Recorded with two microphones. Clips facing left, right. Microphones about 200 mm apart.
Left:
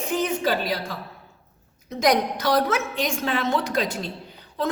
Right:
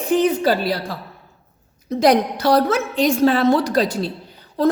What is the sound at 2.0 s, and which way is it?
A woman's voice, 30° right (ahead or behind).